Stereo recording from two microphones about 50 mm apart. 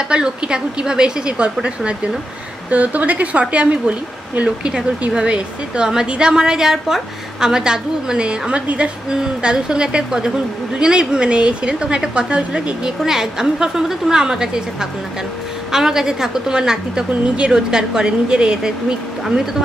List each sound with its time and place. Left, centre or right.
0.1 s a woman's voice: centre